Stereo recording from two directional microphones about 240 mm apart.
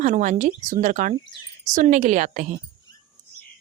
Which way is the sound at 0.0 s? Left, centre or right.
Right.